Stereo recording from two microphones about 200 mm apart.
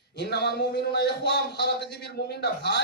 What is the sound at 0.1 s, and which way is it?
A man's voice, 55° left (ahead or behind).